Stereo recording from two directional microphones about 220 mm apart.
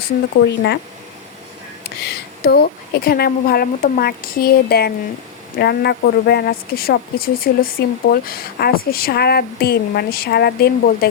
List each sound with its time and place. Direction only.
0.4 s speech: 50° left (ahead or behind)
2.0 s speech: 45° left (ahead or behind)